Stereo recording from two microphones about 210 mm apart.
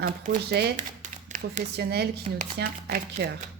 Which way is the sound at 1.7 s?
50° right (ahead or behind).